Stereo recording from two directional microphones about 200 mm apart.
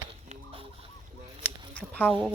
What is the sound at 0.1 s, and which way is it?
Chicken, 25° right (ahead or behind).